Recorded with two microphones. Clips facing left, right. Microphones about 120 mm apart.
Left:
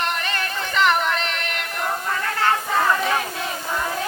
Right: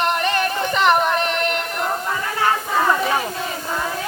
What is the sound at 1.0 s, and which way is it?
Music, 20° right (ahead or behind).